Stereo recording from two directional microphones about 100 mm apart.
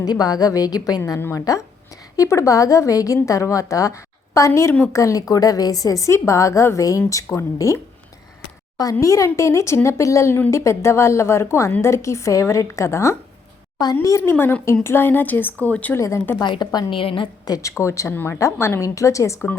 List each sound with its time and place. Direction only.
0.0 s a woman's voice: 40° left (ahead or behind)
8.8 s a woman's voice: 35° left (ahead or behind); by 16.0 s 15° left (ahead or behind)
16.0 s a woman's voice: 30° left (ahead or behind)
16.4 s a woman's voice: 45° left (ahead or behind)
17.4 s a woman's voice: 35° left (ahead or behind)